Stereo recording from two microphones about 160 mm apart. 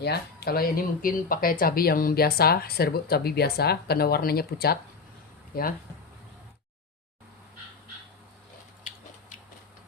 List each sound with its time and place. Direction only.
0.0 s speech: 80° left